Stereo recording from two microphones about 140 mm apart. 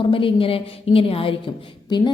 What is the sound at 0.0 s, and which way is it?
A woman's voice, 40° left (ahead or behind).